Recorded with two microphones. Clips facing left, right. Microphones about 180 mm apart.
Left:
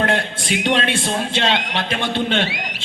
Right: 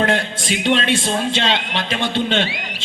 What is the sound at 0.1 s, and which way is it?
A man's voice, 60° left (ahead or behind).